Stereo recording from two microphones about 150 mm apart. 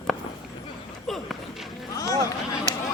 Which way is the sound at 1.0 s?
Centre (ahead or behind).